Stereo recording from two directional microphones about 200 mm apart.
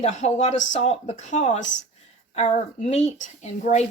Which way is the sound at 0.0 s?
35° left (ahead or behind).